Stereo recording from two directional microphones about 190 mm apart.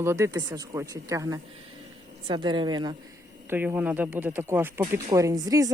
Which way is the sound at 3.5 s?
10° right (ahead or behind).